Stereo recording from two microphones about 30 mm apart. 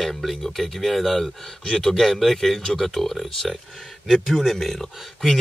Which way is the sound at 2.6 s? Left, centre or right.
Left.